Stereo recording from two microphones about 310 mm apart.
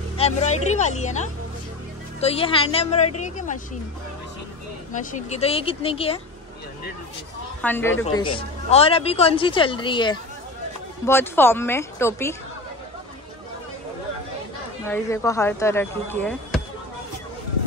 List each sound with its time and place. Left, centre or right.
0.2 s speech: left
4.9 s speech: left
7.6 s speech: centre
7.9 s a woman's voice: left
8.4 s speech: centre
14.9 s speech: centre